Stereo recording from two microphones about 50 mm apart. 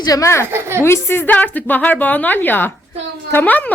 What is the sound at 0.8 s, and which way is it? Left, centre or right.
Speech, left.